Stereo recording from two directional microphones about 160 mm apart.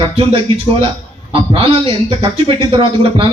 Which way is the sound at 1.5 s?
35° right (ahead or behind).